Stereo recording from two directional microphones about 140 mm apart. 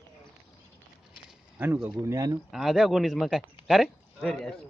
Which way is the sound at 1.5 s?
10° right (ahead or behind).